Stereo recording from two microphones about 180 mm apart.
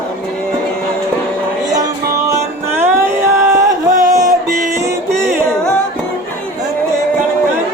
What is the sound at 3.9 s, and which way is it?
Music, 45° right (ahead or behind).